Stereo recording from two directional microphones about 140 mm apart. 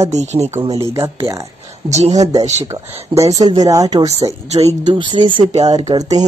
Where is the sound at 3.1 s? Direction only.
25° right (ahead or behind).